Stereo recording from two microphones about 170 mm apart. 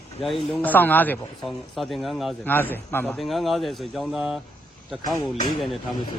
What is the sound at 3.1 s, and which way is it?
Speech, centre (ahead or behind).